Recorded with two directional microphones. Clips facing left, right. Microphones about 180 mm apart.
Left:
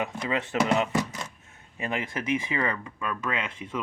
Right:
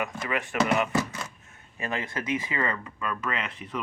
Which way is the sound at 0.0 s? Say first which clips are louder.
Left 1 dB; 25° left (ahead or behind).